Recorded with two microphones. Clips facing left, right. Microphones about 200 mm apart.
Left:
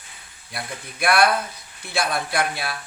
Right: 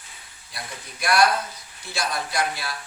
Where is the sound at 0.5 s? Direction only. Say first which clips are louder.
Left 4 dB; 60° left (ahead or behind).